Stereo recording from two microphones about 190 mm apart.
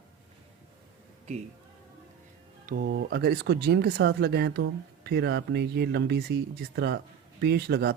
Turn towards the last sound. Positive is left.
turn(degrees=-55)  # may be behind; listen again after turning